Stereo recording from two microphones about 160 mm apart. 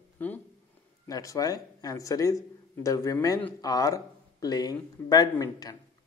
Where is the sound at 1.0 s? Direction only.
20° left (ahead or behind).